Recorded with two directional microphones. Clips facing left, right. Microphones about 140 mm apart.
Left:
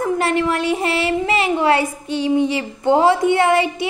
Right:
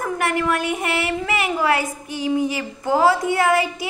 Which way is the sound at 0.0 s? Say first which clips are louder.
Left 4 dB; 25° left (ahead or behind).